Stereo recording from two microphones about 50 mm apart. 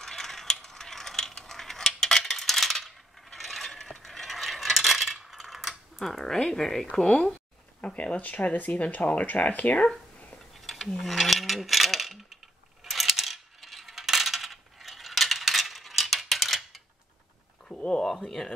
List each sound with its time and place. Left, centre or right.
0.0 s mechanisms: centre
6.2 s speech: centre
7.8 s speech: left
10.6 s a sound: centre
11.0 s coin: centre
17.6 s a sound: centre